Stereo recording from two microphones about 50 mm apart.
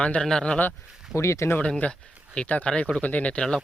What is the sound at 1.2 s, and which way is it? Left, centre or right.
Speech, left.